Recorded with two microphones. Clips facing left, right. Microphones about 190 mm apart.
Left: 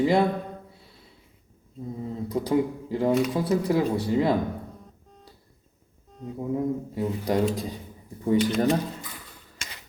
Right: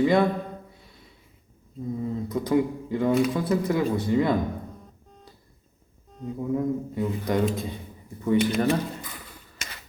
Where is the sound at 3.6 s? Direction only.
30° left (ahead or behind).